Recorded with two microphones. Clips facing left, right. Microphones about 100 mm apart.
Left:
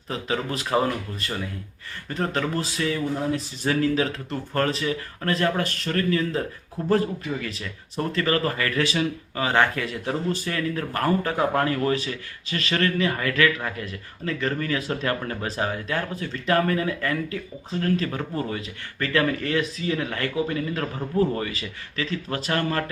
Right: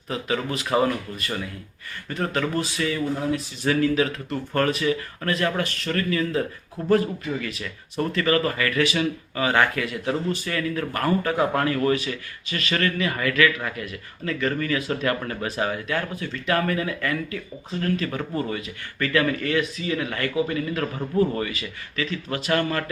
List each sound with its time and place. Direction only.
0.1 s speech: 35° left (ahead or behind)
7.4 s speech: 30° left (ahead or behind)